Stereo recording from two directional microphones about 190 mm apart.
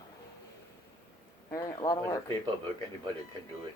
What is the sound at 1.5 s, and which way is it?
Speech, 15° left (ahead or behind).